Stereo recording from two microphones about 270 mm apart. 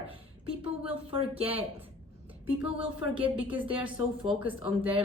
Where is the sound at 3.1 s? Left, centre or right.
Centre.